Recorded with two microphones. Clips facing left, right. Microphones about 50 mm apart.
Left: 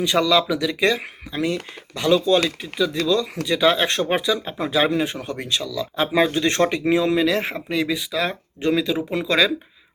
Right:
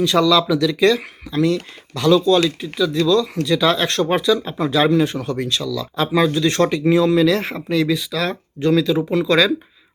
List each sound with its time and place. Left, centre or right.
0.0 s speech: centre
6.1 s speech: left; by 9.5 s centre